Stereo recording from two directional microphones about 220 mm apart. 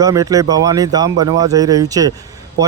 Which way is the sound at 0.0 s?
15° right (ahead or behind).